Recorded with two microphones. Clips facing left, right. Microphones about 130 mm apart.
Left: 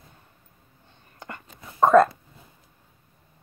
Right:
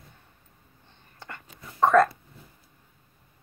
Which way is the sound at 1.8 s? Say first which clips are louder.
Left 3 dB; 25° left (ahead or behind).